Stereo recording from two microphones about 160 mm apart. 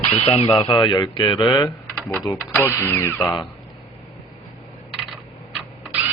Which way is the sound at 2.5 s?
15° left (ahead or behind).